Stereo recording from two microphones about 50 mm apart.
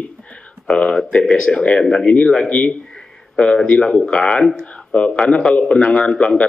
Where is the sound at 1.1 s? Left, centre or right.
Centre.